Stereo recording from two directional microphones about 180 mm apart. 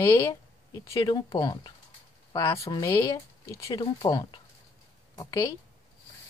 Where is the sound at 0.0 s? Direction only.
20° left (ahead or behind).